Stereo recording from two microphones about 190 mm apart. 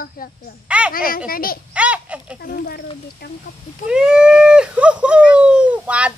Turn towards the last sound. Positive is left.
turn(degrees=-5)  # may be behind; listen again after turning